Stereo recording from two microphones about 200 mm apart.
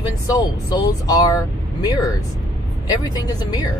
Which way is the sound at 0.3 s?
20° left (ahead or behind).